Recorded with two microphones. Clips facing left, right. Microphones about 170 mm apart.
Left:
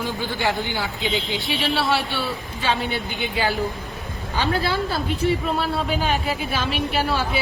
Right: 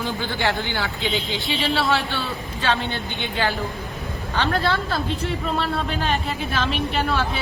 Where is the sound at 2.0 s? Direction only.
15° left (ahead or behind).